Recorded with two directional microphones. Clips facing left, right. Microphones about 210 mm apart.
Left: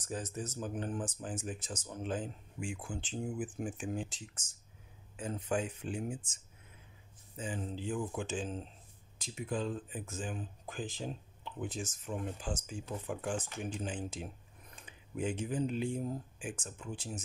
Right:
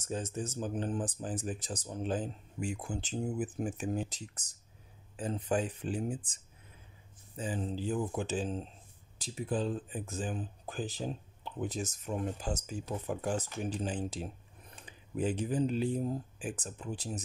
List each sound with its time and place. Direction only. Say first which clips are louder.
0.0 s speech: right 3 dB; 25° right (ahead or behind)